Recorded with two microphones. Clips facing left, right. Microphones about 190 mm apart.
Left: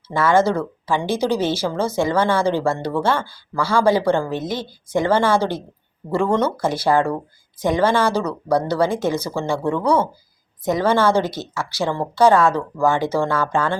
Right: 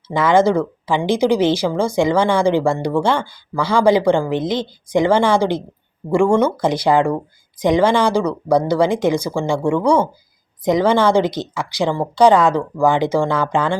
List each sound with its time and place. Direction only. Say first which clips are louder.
0.1 s speech: right 3 dB; 15° right (ahead or behind)